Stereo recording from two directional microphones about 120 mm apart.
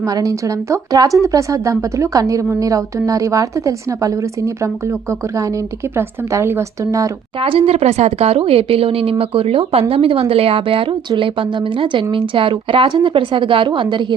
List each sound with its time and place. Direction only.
0.0 s a woman's voice: 30° right (ahead or behind)
6.0 s a woman's voice: 20° right (ahead or behind)
7.4 s a woman's voice: 50° right (ahead or behind)